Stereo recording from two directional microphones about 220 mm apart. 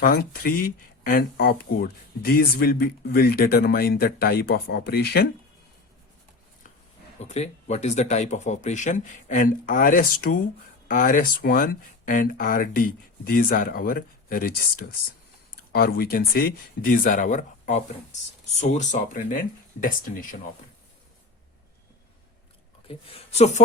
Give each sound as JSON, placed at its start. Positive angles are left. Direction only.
{"t": 0.0, "sound": "speech", "side_deg": 45}
{"t": 7.2, "sound": "speech", "side_deg": 30}
{"t": 15.7, "sound": "speech", "side_deg": 45}
{"t": 22.9, "sound": "speech", "side_deg": 30}